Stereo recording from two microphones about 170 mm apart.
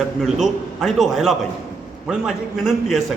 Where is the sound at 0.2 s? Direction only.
Centre (ahead or behind).